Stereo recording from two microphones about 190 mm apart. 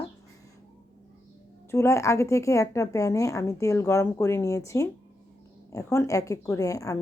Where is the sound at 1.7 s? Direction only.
15° left (ahead or behind).